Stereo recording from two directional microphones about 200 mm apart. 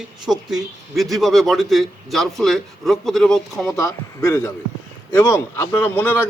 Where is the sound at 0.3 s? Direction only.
Centre (ahead or behind).